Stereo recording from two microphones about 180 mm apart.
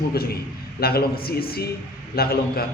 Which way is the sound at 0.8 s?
60° left (ahead or behind).